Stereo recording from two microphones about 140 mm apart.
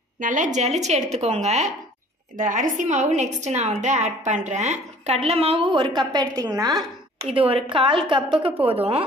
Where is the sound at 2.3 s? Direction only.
70° right (ahead or behind); by 7.3 s 30° right (ahead or behind).